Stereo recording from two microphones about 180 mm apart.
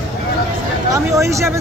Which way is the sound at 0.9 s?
15° right (ahead or behind).